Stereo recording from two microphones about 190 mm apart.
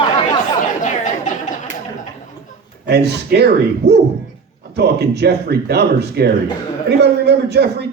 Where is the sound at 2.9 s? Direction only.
60° right (ahead or behind).